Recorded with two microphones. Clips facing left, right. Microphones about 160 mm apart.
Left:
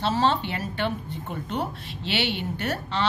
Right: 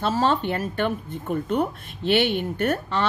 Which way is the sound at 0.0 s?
45° right (ahead or behind).